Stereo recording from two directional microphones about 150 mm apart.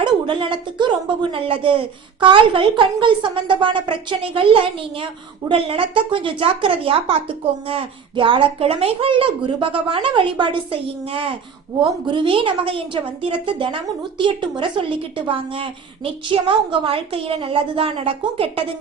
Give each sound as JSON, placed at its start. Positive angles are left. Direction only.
{"t": 0.0, "sound": "a woman's voice", "side_deg": -35}